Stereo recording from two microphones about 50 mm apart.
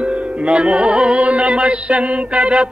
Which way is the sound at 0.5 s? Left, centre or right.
Centre.